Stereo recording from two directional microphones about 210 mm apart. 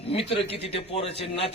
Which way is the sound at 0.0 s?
25° left (ahead or behind).